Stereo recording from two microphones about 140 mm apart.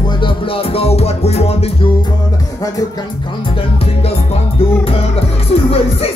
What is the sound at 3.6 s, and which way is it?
Music, 45° left (ahead or behind).